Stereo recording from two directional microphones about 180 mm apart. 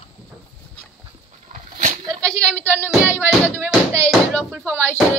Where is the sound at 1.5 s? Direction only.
45° right (ahead or behind).